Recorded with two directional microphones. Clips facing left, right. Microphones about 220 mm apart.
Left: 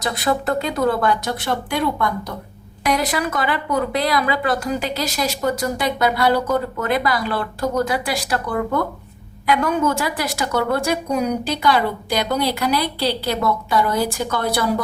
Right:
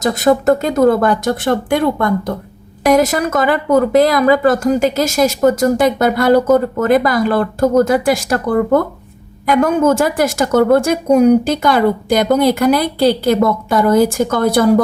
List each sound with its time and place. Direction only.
0.0 s a woman's voice: 45° right (ahead or behind)